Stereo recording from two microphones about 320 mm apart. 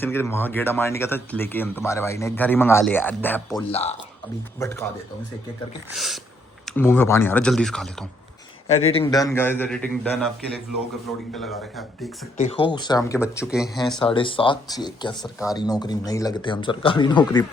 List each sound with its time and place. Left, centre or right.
0.0 s speech: centre
3.7 s speech: centre
4.6 s speech: centre
5.9 s speech: centre
8.6 s speech: centre
12.4 s speech: centre